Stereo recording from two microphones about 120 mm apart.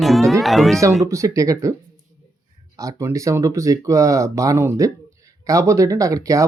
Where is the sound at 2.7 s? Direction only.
25° right (ahead or behind).